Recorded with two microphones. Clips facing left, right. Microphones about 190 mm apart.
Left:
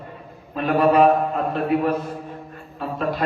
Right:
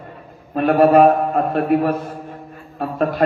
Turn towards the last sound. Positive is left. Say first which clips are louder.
# right 6 dB
turn(degrees=-55)  # may be behind; listen again after turning